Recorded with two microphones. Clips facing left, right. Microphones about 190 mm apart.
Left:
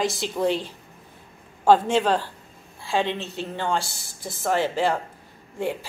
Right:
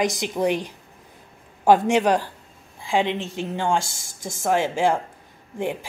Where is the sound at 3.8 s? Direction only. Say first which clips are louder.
Right 1 dB; 45° right (ahead or behind).